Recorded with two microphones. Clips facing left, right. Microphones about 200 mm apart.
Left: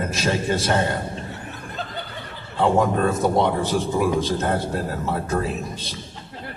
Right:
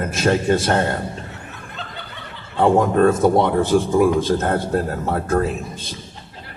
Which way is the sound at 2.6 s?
50° right (ahead or behind).